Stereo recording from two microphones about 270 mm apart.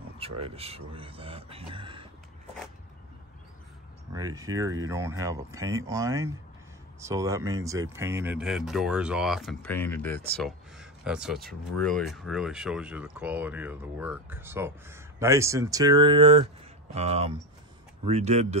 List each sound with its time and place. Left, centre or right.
0.2 s speech: right
4.1 s speech: centre